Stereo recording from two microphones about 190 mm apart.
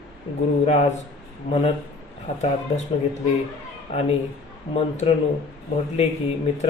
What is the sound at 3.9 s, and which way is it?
Speech, 30° left (ahead or behind).